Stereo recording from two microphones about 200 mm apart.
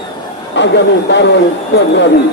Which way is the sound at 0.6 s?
60° left (ahead or behind).